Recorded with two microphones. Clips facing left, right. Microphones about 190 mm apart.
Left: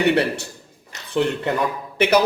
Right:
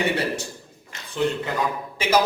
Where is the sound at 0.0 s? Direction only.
65° left (ahead or behind).